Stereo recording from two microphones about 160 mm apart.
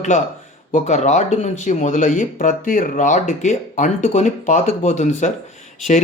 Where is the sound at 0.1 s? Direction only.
50° left (ahead or behind).